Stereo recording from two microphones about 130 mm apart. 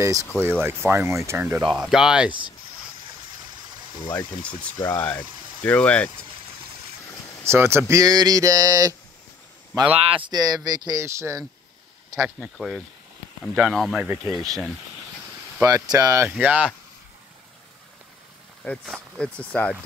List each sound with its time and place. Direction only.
0.0 s speech: 25° right (ahead or behind)
1.7 s speech: 5° right (ahead or behind)
4.1 s speech: 10° left (ahead or behind)
7.4 s speech: 20° right (ahead or behind)
9.9 s speech: 45° right (ahead or behind)
10.3 s speech: 30° right (ahead or behind)
12.4 s speech: 5° right (ahead or behind)
14.0 s speech: 20° right (ahead or behind)
14.3 s speech: centre (ahead or behind)
15.6 s speech: 30° right (ahead or behind)
16.3 s speech: 10° right (ahead or behind)
18.6 s speech: 5° left (ahead or behind)